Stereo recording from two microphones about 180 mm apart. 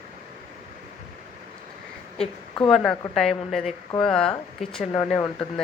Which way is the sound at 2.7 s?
Centre (ahead or behind).